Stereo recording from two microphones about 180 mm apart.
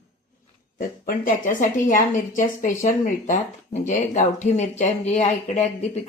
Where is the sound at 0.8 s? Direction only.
50° left (ahead or behind).